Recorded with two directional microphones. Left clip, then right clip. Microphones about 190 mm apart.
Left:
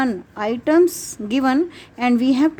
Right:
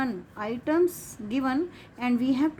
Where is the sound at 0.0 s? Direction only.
45° left (ahead or behind).